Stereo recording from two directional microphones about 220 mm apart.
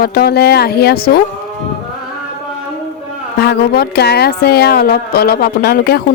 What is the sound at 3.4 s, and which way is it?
A woman's voice, 45° left (ahead or behind).